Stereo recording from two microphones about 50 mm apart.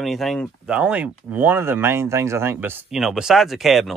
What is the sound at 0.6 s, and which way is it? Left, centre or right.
Speech, right.